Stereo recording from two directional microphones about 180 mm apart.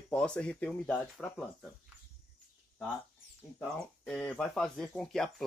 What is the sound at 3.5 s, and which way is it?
Speech, 5° left (ahead or behind).